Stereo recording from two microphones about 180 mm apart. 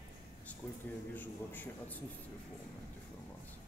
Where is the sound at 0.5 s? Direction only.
10° left (ahead or behind).